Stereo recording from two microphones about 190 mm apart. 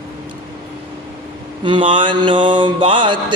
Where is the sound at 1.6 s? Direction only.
25° right (ahead or behind).